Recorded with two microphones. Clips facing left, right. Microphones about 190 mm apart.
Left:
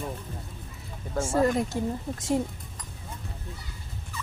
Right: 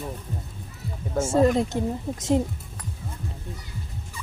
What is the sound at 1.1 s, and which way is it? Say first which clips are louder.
Speech: right 4 dB; 25° right (ahead or behind).